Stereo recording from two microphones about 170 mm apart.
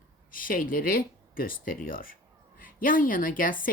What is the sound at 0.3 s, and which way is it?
Speech, 55° left (ahead or behind).